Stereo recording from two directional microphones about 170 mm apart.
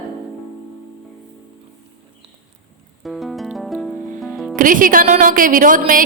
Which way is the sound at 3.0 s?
Centre (ahead or behind).